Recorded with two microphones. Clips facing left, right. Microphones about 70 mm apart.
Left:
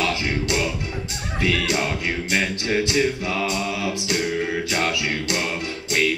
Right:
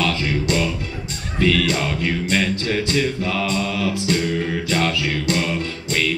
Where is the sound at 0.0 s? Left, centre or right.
Centre.